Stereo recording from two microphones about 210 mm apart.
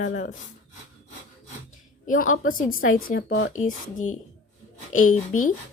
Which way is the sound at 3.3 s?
70° left (ahead or behind).